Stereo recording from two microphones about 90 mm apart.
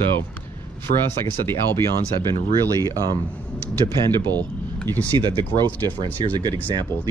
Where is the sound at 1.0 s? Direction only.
25° left (ahead or behind).